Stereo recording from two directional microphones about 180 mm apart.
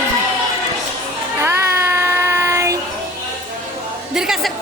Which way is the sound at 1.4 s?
10° right (ahead or behind).